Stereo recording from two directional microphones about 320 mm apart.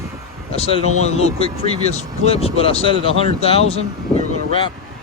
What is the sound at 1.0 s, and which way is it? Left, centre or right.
Speech, centre.